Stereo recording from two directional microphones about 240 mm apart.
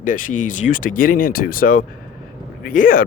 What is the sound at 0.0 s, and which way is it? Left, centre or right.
Speech, left.